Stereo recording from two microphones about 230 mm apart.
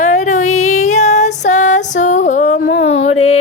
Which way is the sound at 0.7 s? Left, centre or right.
Left.